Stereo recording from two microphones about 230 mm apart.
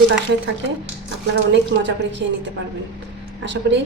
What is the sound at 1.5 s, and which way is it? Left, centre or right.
Speech, right.